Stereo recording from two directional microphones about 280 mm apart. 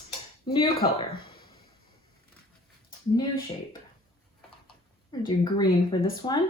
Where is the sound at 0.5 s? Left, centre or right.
Centre.